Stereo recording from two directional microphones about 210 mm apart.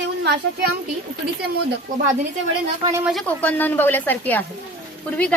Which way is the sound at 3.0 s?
Centre (ahead or behind).